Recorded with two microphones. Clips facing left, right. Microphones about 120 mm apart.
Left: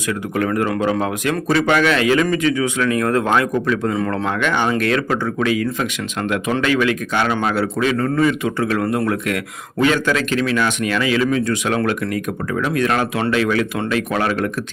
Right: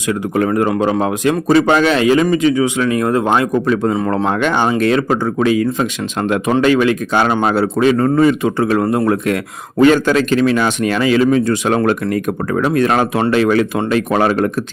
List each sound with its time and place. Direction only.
0.3 s speech: 25° right (ahead or behind)
3.7 s speech: 30° right (ahead or behind)